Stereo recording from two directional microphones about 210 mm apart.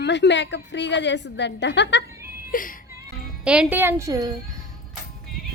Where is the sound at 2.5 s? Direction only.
40° left (ahead or behind).